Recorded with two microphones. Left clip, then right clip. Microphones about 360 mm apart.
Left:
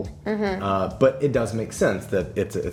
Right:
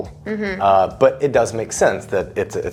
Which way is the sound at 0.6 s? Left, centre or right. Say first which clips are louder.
Right 8 dB; right.